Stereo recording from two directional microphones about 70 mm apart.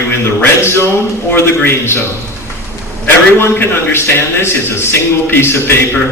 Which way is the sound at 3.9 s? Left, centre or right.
Left.